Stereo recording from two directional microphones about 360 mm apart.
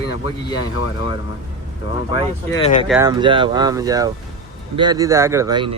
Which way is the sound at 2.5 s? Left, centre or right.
Centre.